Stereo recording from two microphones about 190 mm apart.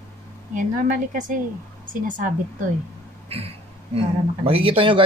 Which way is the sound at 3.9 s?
30° right (ahead or behind).